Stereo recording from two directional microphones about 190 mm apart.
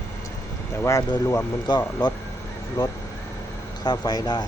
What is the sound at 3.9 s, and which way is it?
Speech, 20° left (ahead or behind).